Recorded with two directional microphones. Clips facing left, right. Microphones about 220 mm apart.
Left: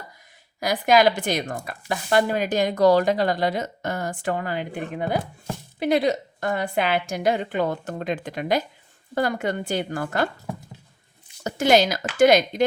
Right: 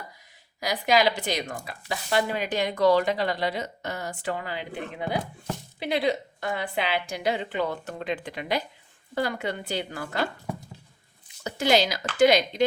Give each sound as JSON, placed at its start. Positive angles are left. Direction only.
{"t": 0.6, "sound": "speech", "side_deg": 50}
{"t": 11.4, "sound": "speech", "side_deg": 50}